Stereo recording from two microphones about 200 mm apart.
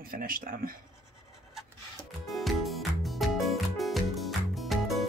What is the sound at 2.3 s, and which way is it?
Music, centre (ahead or behind).